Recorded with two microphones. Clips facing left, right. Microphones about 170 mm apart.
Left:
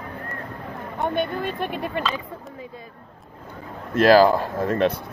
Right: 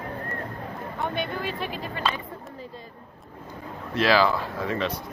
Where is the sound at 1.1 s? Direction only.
50° left (ahead or behind).